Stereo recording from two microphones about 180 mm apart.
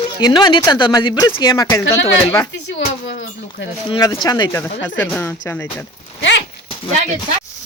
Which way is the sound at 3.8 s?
25° left (ahead or behind).